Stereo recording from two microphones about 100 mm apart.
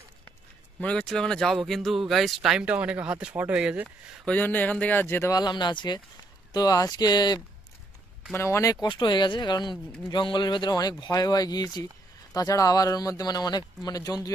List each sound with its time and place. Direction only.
0.7 s speech: 10° left (ahead or behind)
2.6 s speech: 15° right (ahead or behind)
4.3 s speech: 15° left (ahead or behind)
5.3 s speech: 45° left (ahead or behind)
6.5 s speech: 40° left (ahead or behind)
8.3 s speech: 25° left (ahead or behind)
8.8 s speech: 50° left (ahead or behind)